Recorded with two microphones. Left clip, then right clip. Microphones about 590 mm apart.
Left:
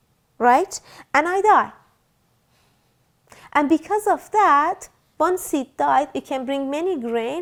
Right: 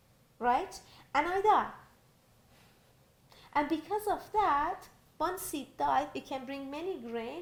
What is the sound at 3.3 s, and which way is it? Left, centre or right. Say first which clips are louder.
A woman's voice: left 13 dB; left.